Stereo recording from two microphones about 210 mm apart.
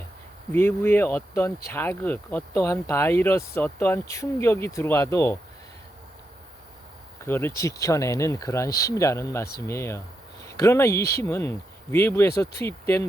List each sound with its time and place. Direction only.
0.5 s speech: 10° left (ahead or behind)
7.2 s speech: 10° left (ahead or behind)